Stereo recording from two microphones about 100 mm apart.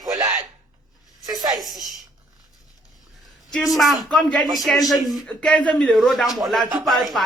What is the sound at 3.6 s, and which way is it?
A man's voice, centre (ahead or behind).